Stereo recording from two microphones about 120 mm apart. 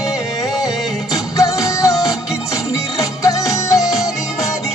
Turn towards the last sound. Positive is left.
turn(degrees=30)  # may be behind; listen again after turning